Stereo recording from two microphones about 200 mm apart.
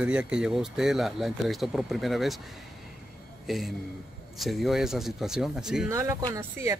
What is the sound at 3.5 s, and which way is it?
Speech, centre (ahead or behind).